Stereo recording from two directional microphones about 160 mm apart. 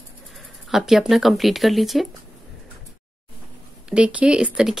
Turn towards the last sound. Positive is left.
turn(degrees=-5)  # may be behind; listen again after turning